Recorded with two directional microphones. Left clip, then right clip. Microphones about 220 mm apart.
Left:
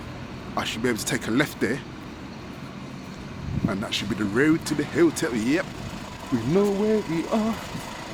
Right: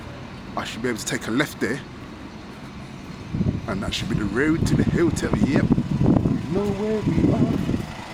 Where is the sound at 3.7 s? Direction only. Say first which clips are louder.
Left 1 dB; 5° right (ahead or behind).